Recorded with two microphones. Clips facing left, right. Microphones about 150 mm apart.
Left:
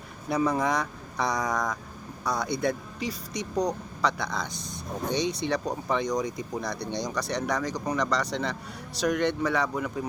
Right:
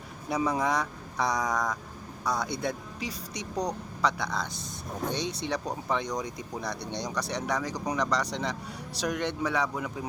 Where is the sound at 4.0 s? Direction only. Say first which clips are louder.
Left 1 dB; 10° right (ahead or behind).